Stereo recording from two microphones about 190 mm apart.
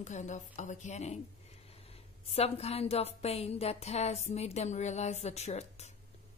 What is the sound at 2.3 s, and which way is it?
A woman's voice, 35° left (ahead or behind).